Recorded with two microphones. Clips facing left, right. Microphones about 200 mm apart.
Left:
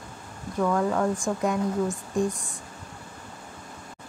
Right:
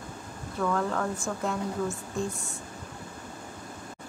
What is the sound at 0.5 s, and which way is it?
Speech, 15° left (ahead or behind).